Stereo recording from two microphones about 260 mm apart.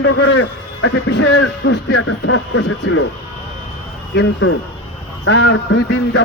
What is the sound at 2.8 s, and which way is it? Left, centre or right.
Speech, left.